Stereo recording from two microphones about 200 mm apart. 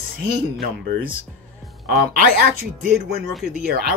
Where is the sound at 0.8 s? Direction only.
45° right (ahead or behind).